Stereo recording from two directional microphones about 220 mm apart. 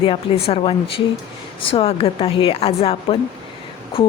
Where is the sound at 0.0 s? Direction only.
25° left (ahead or behind).